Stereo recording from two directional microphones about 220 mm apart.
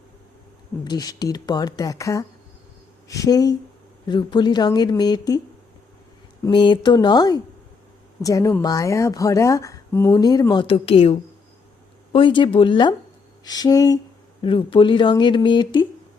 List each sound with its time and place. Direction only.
0.9 s a woman's voice: 20° left (ahead or behind)
6.4 s a woman's voice: 20° left (ahead or behind)